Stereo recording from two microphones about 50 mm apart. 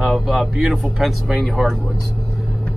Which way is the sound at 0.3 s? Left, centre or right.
Centre.